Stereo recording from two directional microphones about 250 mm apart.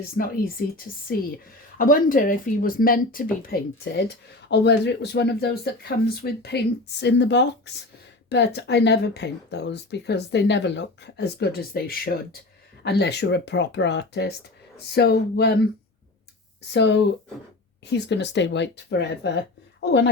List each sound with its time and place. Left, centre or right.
0.2 s speech: left
1.8 s speech: left
16.6 s speech: left